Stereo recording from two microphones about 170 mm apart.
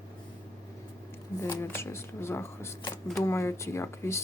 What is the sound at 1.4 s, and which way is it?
Speech, 15° left (ahead or behind).